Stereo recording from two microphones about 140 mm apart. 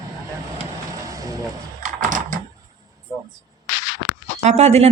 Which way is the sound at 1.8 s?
70° right (ahead or behind).